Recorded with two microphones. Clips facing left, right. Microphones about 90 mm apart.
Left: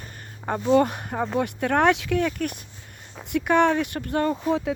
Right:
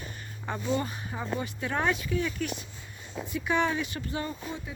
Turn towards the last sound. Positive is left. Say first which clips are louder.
# left 12 dB
turn(degrees=90)